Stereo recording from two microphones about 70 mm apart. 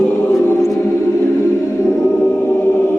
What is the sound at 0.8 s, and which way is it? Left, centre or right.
Music, left.